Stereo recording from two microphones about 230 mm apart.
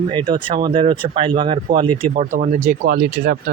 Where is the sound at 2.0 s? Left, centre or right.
Right.